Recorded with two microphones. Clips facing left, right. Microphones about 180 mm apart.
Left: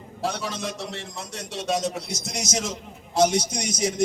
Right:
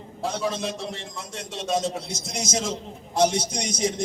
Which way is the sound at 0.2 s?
75° left (ahead or behind).